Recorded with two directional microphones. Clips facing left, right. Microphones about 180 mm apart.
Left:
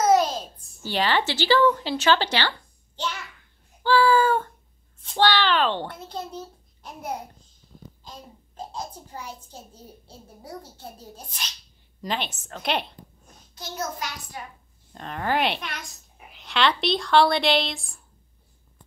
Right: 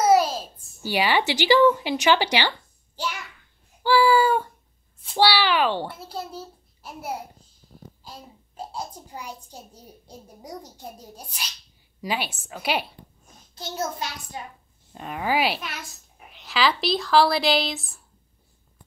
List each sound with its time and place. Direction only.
0.0 s a child's voice: 5° right (ahead or behind)
3.8 s child singing: 10° right (ahead or behind)
5.0 s a child's voice: 10° right (ahead or behind)
13.6 s a child's voice: 25° right (ahead or behind)
14.9 s a child's voice: 10° right (ahead or behind)